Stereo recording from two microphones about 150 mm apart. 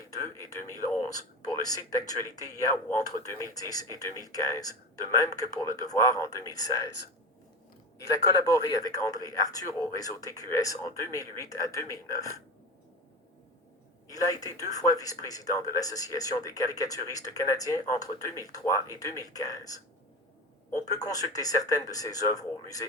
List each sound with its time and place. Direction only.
0.1 s a sound: 20° left (ahead or behind)
1.5 s speech: 25° left (ahead or behind)
7.9 s speech: 20° left (ahead or behind)
14.1 s speech: 25° left (ahead or behind)